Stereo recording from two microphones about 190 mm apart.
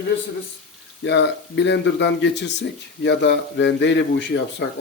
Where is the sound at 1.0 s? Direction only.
65° left (ahead or behind).